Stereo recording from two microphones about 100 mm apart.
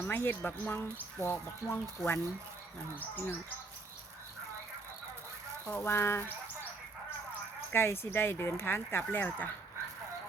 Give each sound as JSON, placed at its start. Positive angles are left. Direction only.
{"t": 0.0, "sound": "speech", "side_deg": 20}
{"t": 5.6, "sound": "speech", "side_deg": 25}
{"t": 7.7, "sound": "speech", "side_deg": 25}